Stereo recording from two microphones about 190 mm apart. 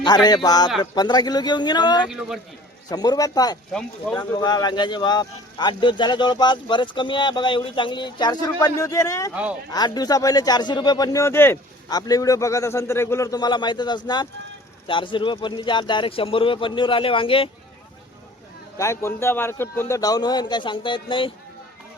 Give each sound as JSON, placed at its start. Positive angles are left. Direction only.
{"t": 0.0, "sound": "speech", "side_deg": 20}
{"t": 3.7, "sound": "speech", "side_deg": 5}
{"t": 4.2, "sound": "speech", "side_deg": 20}
{"t": 9.3, "sound": "speech", "side_deg": -5}
{"t": 9.7, "sound": "speech", "side_deg": 20}
{"t": 18.8, "sound": "speech", "side_deg": 15}